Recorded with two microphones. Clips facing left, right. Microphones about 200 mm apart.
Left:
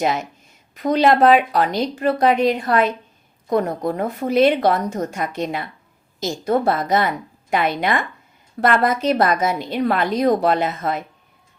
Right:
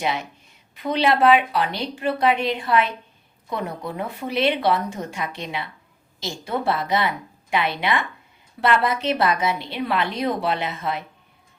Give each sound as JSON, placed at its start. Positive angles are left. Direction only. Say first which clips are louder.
{"t": 0.0, "sound": "a woman's voice", "louder": "left 5 dB", "side_deg": 45}